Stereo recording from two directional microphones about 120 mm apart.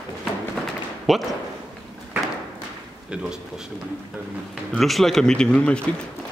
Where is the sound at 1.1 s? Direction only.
Centre (ahead or behind).